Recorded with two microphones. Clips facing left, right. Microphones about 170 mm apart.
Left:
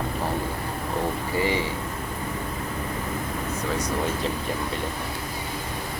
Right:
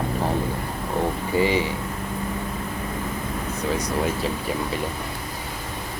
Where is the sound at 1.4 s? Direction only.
20° right (ahead or behind).